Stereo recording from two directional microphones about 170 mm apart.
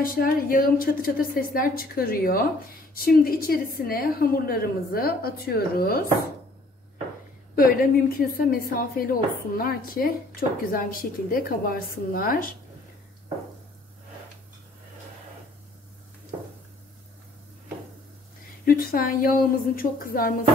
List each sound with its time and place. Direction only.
0.0 s a woman's voice: 55° left (ahead or behind)
7.5 s a woman's voice: 55° left (ahead or behind)
18.7 s a woman's voice: 60° left (ahead or behind)